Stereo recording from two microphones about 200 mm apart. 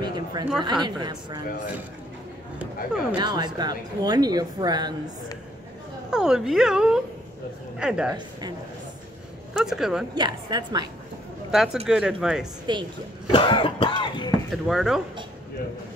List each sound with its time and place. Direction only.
0.0 s a sound: 20° right (ahead or behind)
0.7 s speech: 20° right (ahead or behind)
2.6 s speech: 5° right (ahead or behind)
3.2 s speech: 20° right (ahead or behind)
6.0 s speech: 5° right (ahead or behind)
8.1 s speech: 20° right (ahead or behind)
9.5 s speech: centre (ahead or behind)
10.1 s speech: 20° right (ahead or behind)
11.5 s speech: 5° right (ahead or behind)
12.7 s speech: 25° right (ahead or behind)
13.3 s cough: 25° left (ahead or behind)
14.5 s speech: centre (ahead or behind)